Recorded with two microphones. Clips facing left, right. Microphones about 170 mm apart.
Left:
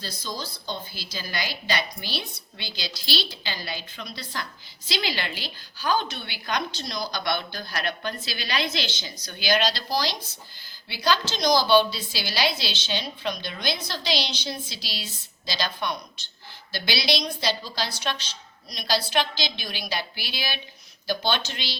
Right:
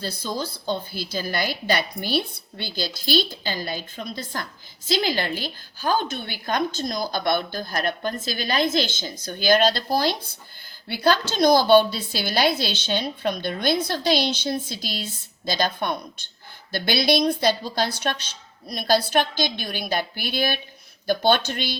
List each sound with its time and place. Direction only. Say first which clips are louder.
0.0 s a woman's voice: right 6 dB; 55° right (ahead or behind)